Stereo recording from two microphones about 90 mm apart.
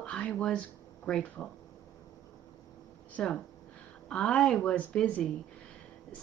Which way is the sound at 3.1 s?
10° left (ahead or behind).